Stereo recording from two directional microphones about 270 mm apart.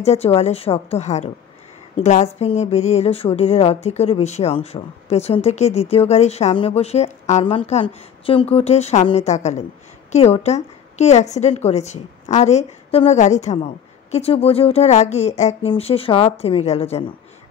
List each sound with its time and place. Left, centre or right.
0.0 s speech: left